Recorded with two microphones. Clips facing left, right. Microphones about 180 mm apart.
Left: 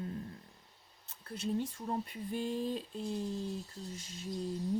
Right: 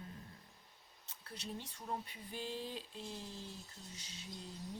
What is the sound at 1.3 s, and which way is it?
Speech, 50° left (ahead or behind).